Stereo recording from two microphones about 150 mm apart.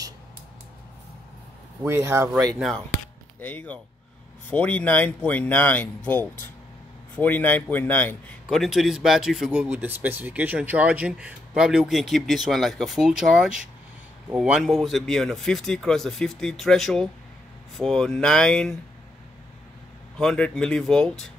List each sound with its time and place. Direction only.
1.8 s speech: 15° right (ahead or behind)
3.3 s a man's voice: 10° left (ahead or behind)
20.2 s a man's voice: 5° left (ahead or behind)